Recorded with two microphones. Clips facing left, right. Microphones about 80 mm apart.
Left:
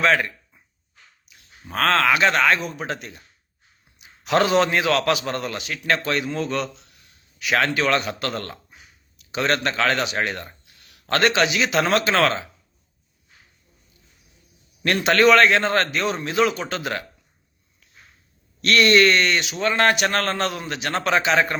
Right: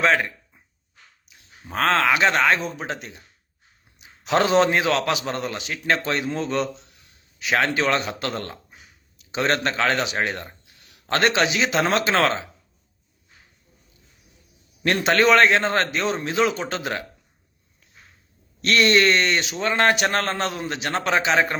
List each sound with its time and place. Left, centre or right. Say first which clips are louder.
0.0 s a sound: even; centre
1.7 s a man's voice: left 1 dB; centre
3.9 s a sound: even; right
4.4 s a man's voice: right 1 dB; right
15.1 s a man's voice: left 1 dB; right
18.6 s a man's voice: left 2 dB; right